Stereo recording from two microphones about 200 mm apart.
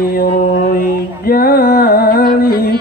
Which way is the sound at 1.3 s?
50° left (ahead or behind).